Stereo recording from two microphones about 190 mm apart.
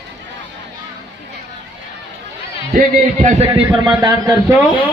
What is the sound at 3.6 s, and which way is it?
Speech, 20° right (ahead or behind).